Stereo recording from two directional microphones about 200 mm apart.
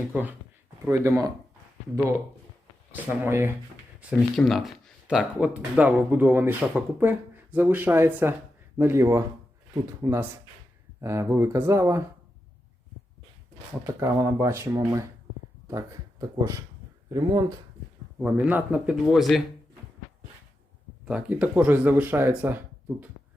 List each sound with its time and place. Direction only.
0.1 s speech: 10° right (ahead or behind)
2.9 s speech: 10° right (ahead or behind)
4.4 s speech: centre (ahead or behind)
13.8 s speech: 15° right (ahead or behind)
18.2 s speech: 5° right (ahead or behind)
21.0 s speech: 5° right (ahead or behind)